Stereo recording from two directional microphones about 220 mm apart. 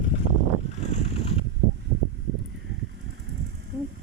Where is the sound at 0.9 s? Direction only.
30° left (ahead or behind).